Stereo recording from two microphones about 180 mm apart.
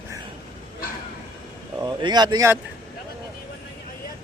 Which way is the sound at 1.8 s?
25° right (ahead or behind).